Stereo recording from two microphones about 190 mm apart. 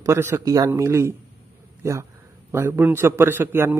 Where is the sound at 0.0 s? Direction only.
15° right (ahead or behind).